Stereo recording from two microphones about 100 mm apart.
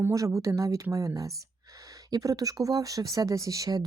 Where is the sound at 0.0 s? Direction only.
30° right (ahead or behind).